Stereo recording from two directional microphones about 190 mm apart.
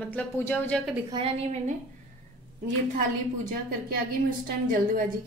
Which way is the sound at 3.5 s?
50° right (ahead or behind).